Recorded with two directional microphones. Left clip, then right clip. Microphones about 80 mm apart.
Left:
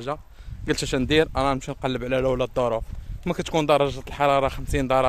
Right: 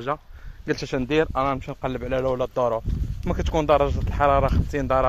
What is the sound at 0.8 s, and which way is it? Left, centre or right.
Speech, left.